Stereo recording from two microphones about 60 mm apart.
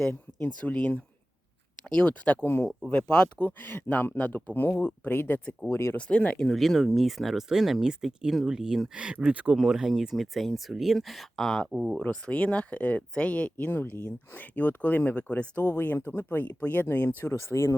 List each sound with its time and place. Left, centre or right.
0.4 s speech: left
2.4 s speech: left
2.9 s speech: centre
3.4 s speech: left
5.7 s speech: left
6.0 s speech: centre; by 9.6 s right
9.6 s speech: centre
11.7 s speech: centre
12.2 s speech: centre
17.2 s speech: left